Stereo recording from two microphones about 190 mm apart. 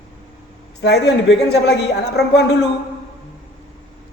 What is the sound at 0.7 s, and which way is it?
A woman's voice, 60° left (ahead or behind).